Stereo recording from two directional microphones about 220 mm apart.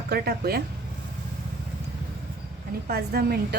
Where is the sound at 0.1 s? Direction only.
45° right (ahead or behind).